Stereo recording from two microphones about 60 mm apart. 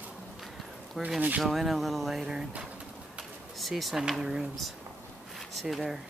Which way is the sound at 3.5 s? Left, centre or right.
Centre.